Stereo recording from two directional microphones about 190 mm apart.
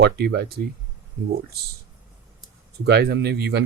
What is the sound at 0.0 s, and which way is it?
Speech, 60° right (ahead or behind).